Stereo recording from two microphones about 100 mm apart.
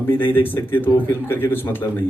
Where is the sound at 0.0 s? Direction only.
20° left (ahead or behind).